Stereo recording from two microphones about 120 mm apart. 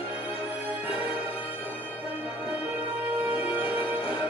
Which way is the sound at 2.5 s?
10° right (ahead or behind).